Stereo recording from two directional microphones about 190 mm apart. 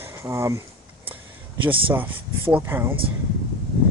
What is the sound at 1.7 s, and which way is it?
Speech, 30° right (ahead or behind).